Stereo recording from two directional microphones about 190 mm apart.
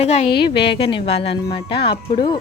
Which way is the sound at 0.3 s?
25° left (ahead or behind).